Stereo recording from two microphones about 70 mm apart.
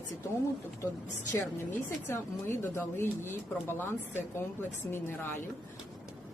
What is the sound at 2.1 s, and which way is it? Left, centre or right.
Speech, left.